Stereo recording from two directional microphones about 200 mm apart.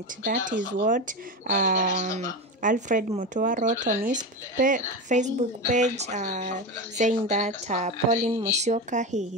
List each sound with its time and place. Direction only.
0.2 s speech: 40° right (ahead or behind)